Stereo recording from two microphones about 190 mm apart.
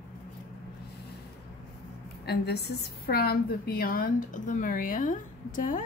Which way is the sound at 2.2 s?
55° left (ahead or behind).